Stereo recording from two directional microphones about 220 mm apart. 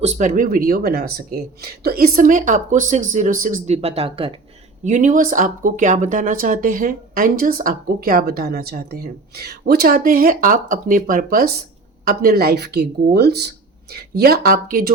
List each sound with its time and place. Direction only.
0.0 s speech: 30° right (ahead or behind)